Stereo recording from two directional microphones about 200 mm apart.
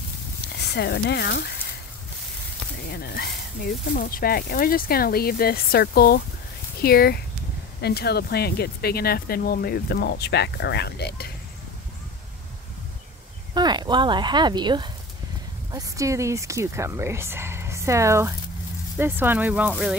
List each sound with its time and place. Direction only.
0.7 s speech: 55° left (ahead or behind)
2.9 s speech: 50° left (ahead or behind)
13.6 s speech: 20° right (ahead or behind); by 20.0 s 5° right (ahead or behind)